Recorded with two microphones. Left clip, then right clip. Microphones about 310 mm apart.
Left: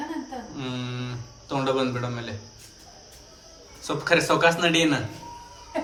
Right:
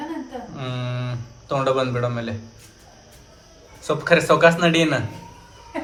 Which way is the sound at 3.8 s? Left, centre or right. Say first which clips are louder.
Right 4 dB; centre.